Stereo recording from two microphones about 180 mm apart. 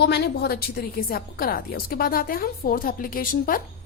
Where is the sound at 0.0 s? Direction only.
65° left (ahead or behind).